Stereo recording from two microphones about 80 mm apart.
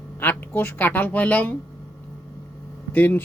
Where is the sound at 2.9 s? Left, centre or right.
Left.